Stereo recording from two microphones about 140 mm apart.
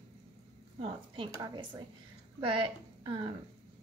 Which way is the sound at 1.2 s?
35° right (ahead or behind).